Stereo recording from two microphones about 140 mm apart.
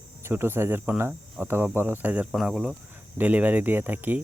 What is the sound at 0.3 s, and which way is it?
Speech, 15° right (ahead or behind).